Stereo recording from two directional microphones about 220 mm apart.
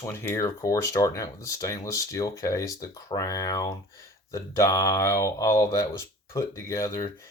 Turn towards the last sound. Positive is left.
turn(degrees=15)  # may be behind; listen again after turning